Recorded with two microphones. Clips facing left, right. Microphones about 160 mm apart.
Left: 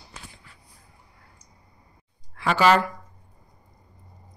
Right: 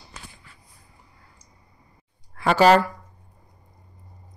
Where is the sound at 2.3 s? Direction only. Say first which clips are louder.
Right 3 dB; 40° right (ahead or behind).